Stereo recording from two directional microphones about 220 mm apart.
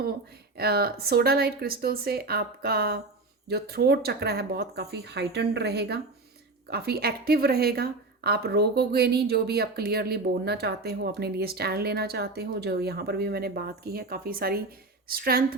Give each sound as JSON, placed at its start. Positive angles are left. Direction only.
{"t": 0.5, "sound": "speech", "side_deg": -45}